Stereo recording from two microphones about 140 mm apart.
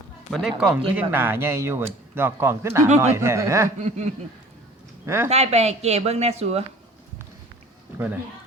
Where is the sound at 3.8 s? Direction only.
55° right (ahead or behind).